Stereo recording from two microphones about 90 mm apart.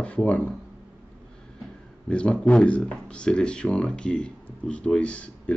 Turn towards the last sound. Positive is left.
turn(degrees=15)  # may be behind; listen again after turning